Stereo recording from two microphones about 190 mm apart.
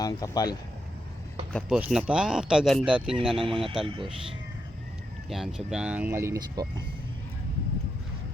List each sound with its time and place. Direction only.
0.0 s speech: 20° left (ahead or behind)
1.5 s speech: 5° right (ahead or behind)
3.2 s speech: 25° right (ahead or behind)
5.3 s speech: centre (ahead or behind); by 6.8 s 20° right (ahead or behind)